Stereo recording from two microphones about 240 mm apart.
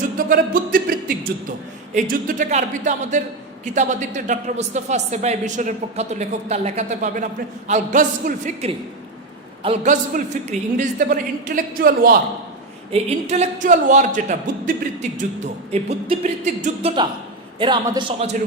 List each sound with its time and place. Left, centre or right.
0.2 s a sound: right
2.0 s a man's voice: right
15.7 s a man's voice: right
17.6 s a man's voice: centre